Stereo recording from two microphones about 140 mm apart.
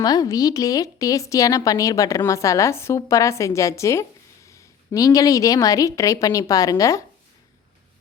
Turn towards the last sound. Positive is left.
turn(degrees=25)  # may be behind; listen again after turning